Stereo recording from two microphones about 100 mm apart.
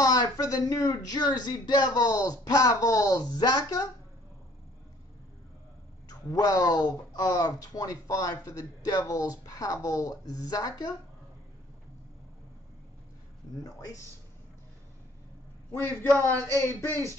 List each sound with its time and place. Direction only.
0.0 s speech: 40° left (ahead or behind)
6.0 s speech: 35° left (ahead or behind)
15.7 s speech: 20° left (ahead or behind)